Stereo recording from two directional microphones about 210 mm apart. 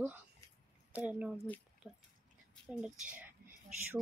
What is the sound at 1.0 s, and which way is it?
Speech, 5° right (ahead or behind).